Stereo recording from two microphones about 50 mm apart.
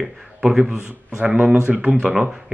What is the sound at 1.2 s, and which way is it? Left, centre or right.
Speech, right.